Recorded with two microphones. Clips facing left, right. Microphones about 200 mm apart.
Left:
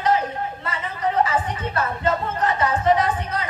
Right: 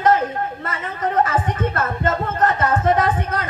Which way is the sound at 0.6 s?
50° right (ahead or behind).